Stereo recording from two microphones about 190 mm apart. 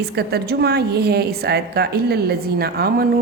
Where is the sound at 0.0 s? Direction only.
60° right (ahead or behind).